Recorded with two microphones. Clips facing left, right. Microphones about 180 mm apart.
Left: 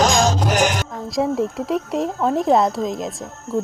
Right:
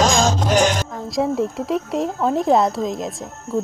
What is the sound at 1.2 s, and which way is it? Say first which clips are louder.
A woman's voice: even; centre (ahead or behind).